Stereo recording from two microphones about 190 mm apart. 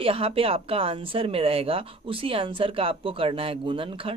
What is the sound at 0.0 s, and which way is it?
A woman's voice, 30° right (ahead or behind).